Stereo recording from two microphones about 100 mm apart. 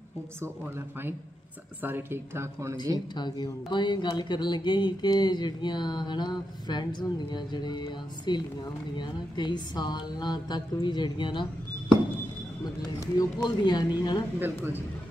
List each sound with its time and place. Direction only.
1.8 s a woman's voice: 20° right (ahead or behind)
3.2 s speech: 45° left (ahead or behind)
13.0 s speech: 40° left (ahead or behind)
14.4 s a woman's voice: 20° right (ahead or behind)